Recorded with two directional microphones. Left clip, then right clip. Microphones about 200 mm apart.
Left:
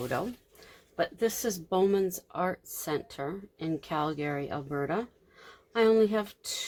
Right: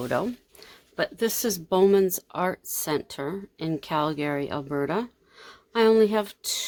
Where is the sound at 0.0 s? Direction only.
50° right (ahead or behind).